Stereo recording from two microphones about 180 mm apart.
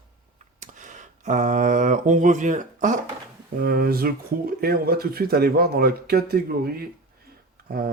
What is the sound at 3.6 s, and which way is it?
Speech, 60° right (ahead or behind).